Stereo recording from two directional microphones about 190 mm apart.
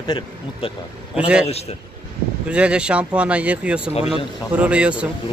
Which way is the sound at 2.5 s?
5° right (ahead or behind).